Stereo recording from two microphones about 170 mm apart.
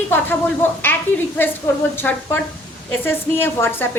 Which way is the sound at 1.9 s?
10° left (ahead or behind).